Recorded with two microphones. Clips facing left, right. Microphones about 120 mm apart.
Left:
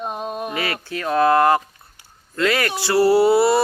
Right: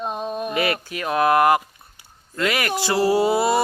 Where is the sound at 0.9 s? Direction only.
15° right (ahead or behind).